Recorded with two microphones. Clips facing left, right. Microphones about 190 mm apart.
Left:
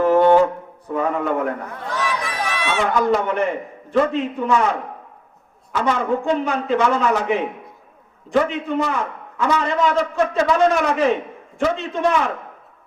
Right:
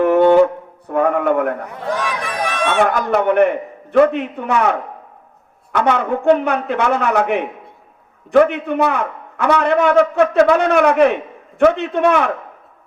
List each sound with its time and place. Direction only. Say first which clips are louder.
0.0 s wind instrument: right 3 dB; 60° right (ahead or behind)
0.9 s a man's voice: right 5 dB; 60° right (ahead or behind)
1.6 s a man's voice: right 3 dB; 15° right (ahead or behind)
2.2 s a man's voice: right 4 dB; 50° right (ahead or behind)